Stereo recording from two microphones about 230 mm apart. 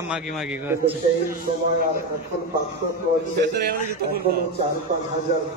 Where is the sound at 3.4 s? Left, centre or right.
Right.